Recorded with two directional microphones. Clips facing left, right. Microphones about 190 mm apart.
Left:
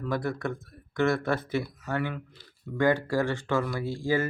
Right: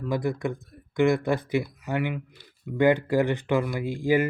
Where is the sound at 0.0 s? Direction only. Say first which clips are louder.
Right 3 dB; 15° right (ahead or behind).